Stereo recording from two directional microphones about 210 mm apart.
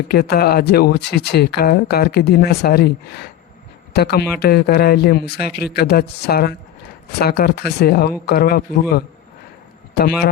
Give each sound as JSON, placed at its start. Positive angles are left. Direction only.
{"t": 0.1, "sound": "speech", "side_deg": 50}
{"t": 9.9, "sound": "a man's voice", "side_deg": 50}